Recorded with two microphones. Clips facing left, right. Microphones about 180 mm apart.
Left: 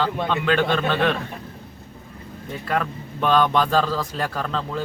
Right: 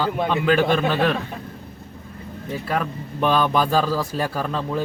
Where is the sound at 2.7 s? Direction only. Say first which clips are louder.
Left 1 dB; 10° right (ahead or behind).